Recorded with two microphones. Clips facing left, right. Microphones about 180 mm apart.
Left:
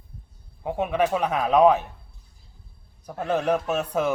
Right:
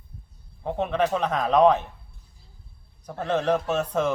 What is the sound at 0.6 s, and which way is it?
A man's voice, 10° left (ahead or behind).